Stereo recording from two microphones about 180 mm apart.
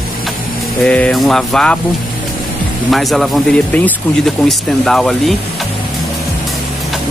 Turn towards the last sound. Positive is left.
turn(degrees=0)  # may be behind; listen again after turning